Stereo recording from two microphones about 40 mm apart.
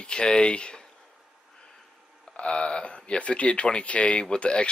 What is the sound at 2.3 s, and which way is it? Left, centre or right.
Speech, left.